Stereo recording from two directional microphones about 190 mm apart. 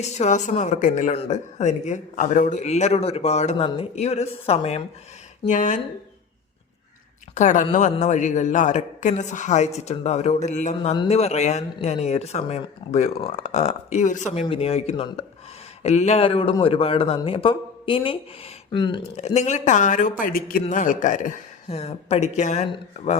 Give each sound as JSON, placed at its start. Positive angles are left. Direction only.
{"t": 0.0, "sound": "speech", "side_deg": 40}
{"t": 7.3, "sound": "a man's voice", "side_deg": 40}
{"t": 19.1, "sound": "speech", "side_deg": 35}